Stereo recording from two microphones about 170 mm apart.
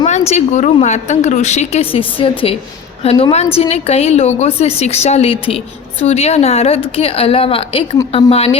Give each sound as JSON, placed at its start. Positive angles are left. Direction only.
{"t": 0.0, "sound": "a woman's voice", "side_deg": 40}